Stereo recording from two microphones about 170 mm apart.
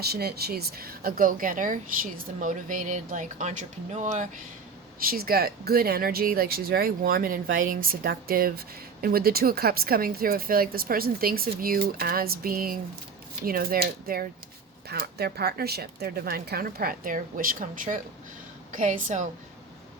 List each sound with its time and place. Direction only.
0.0 s speech: 70° right (ahead or behind); by 4.3 s 45° right (ahead or behind)
5.0 s speech: 65° right (ahead or behind); by 19.3 s 45° right (ahead or behind)